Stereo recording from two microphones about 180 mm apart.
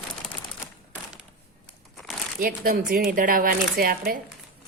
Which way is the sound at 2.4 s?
55° right (ahead or behind).